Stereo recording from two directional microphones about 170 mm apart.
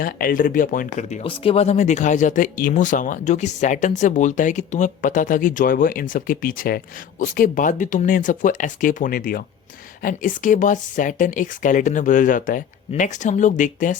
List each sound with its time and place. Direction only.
0.0 s speech: 55° left (ahead or behind)